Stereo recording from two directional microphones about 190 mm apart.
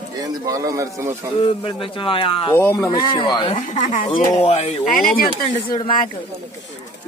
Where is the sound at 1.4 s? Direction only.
25° left (ahead or behind).